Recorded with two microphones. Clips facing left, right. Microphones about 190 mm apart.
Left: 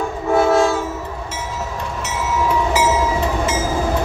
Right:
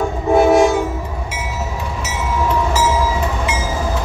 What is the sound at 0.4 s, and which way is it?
Train, 15° right (ahead or behind).